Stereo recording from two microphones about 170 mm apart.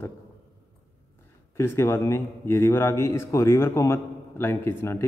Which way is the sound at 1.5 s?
15° left (ahead or behind).